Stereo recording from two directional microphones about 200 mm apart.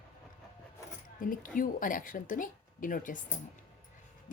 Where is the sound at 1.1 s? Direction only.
45° left (ahead or behind).